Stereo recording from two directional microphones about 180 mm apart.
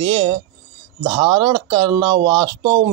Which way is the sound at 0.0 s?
30° right (ahead or behind).